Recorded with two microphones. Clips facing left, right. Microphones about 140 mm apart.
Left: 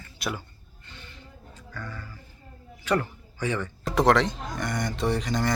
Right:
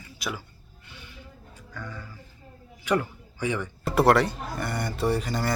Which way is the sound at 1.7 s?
10° right (ahead or behind).